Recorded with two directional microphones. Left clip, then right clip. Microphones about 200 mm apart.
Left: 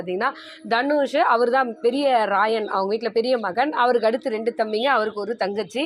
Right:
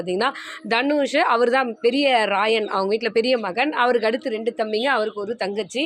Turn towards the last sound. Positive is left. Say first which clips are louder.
# even
turn(degrees=0)  # may be behind; listen again after turning